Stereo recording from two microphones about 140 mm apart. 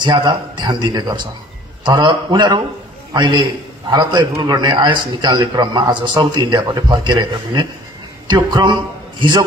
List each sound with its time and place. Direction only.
0.0 s a man's voice: 30° right (ahead or behind)